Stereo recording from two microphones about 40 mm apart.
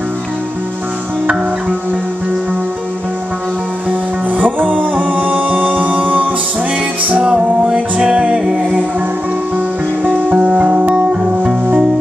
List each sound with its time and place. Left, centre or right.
4.3 s music: right
7.1 s music: right
10.0 s music: right